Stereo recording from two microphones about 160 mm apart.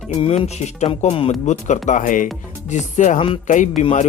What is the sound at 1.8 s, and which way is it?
Speech, 50° left (ahead or behind).